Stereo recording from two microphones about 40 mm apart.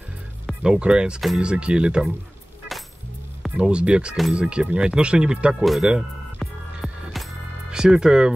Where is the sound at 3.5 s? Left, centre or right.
Right.